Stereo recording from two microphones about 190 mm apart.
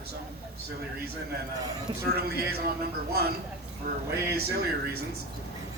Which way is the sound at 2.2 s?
55° right (ahead or behind).